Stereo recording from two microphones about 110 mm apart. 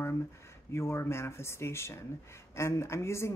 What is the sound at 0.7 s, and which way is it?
Speech, 25° left (ahead or behind).